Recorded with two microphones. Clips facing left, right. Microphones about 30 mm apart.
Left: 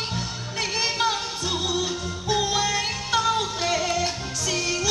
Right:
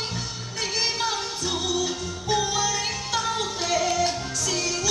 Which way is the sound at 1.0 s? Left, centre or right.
Centre.